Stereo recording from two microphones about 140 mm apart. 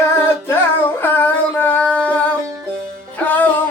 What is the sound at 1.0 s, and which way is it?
Singing, 10° left (ahead or behind).